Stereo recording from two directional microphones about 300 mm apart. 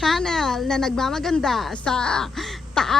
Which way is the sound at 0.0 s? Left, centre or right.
Centre.